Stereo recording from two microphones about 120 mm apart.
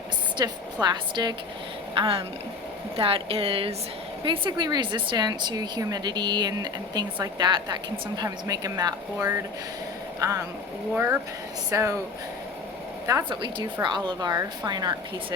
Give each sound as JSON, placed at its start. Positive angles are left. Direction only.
{"t": 0.3, "sound": "speech", "side_deg": -35}
{"t": 2.0, "sound": "speech", "side_deg": -50}
{"t": 10.2, "sound": "speech", "side_deg": -25}
{"t": 13.3, "sound": "speech", "side_deg": -40}